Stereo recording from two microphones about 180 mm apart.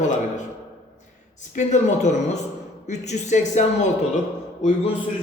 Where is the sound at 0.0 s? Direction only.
45° left (ahead or behind).